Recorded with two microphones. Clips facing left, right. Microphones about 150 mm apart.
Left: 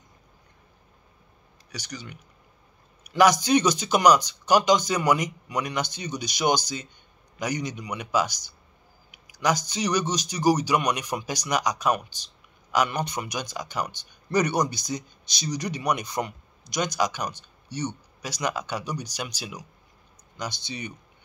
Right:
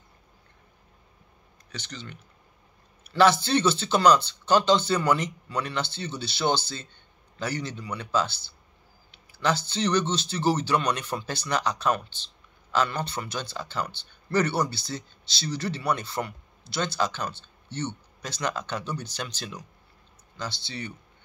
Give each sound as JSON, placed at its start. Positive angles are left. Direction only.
{"t": 1.7, "sound": "speech", "side_deg": 10}